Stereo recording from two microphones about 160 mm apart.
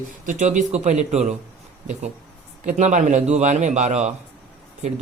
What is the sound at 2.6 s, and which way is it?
Speech, 50° right (ahead or behind).